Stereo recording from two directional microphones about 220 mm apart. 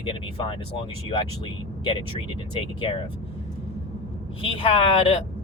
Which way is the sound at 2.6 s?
25° left (ahead or behind).